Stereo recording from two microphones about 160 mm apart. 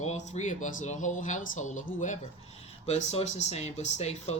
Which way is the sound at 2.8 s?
40° left (ahead or behind).